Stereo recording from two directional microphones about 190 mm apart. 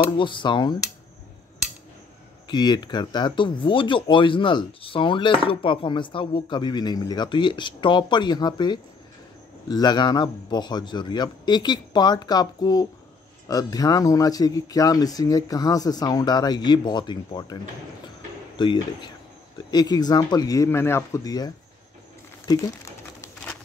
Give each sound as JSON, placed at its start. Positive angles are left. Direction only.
{"t": 0.0, "sound": "speech", "side_deg": 25}
{"t": 2.4, "sound": "speech", "side_deg": 20}
{"t": 19.7, "sound": "speech", "side_deg": 20}